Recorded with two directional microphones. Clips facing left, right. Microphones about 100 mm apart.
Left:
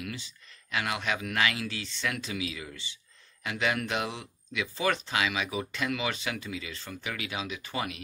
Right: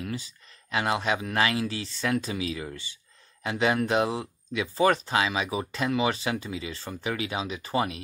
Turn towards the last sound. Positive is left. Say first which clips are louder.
# right 7 dB
turn(degrees=-35)  # may be behind; listen again after turning